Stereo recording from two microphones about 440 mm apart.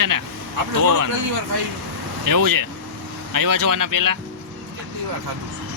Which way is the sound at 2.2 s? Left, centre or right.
Right.